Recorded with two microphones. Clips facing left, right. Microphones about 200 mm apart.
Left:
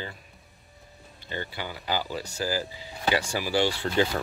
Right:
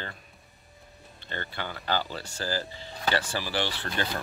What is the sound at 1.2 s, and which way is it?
Speech, 10° left (ahead or behind).